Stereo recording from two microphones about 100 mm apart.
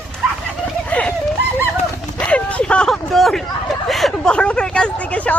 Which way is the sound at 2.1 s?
10° left (ahead or behind).